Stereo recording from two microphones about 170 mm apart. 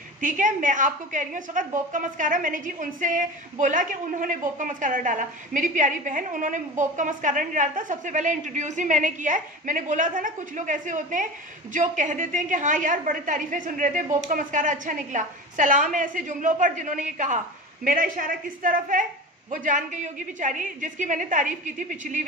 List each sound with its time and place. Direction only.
0.2 s a woman's voice: 50° right (ahead or behind)